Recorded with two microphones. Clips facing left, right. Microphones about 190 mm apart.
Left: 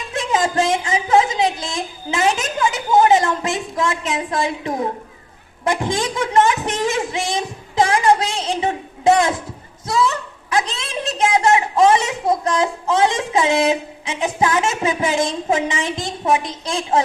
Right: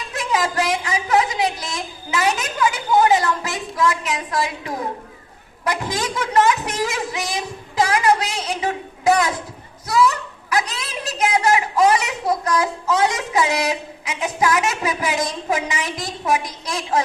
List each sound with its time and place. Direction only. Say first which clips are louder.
0.1 s a woman's voice: left 3 dB; 25° left (ahead or behind)